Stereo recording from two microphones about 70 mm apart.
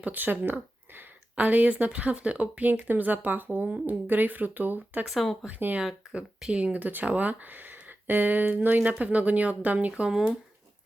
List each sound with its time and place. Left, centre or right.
0.0 s speech: right
5.0 s speech: centre
5.5 s speech: right
5.8 s speech: centre